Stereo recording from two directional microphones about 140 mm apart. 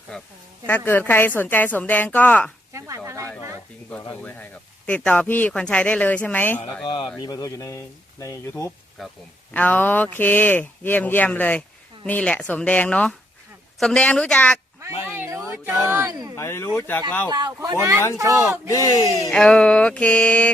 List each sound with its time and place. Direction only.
0.1 s speech: 10° left (ahead or behind)
2.7 s speech: 20° right (ahead or behind)
3.9 s speech: 10° left (ahead or behind)
6.8 s speech: 35° left (ahead or behind)
9.5 s speech: 10° left (ahead or behind)
15.0 s speech: 15° right (ahead or behind)
16.3 s speech: 20° left (ahead or behind)
17.2 s speech: 30° right (ahead or behind)
18.7 s speech: 25° left (ahead or behind)
19.0 s speech: 20° right (ahead or behind)
19.3 s speech: 5° left (ahead or behind)